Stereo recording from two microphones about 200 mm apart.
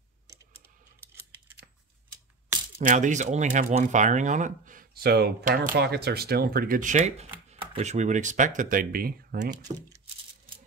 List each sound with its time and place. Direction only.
2.8 s speech: 40° right (ahead or behind)
9.5 s speech: 20° right (ahead or behind)